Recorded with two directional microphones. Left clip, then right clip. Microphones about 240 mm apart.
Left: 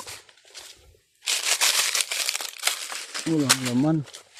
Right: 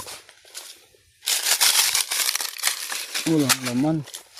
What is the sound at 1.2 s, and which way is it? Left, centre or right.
Crumpling, right.